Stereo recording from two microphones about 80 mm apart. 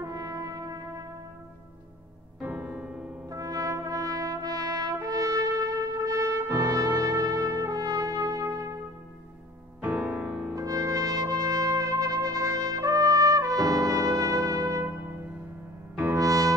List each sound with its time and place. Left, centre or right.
0.0 s brass instrument: right
2.4 s music: right
3.3 s brass instrument: right
6.7 s music: right
7.5 s brass instrument: right
9.8 s music: right
10.5 s trumpet: right
16.2 s music: right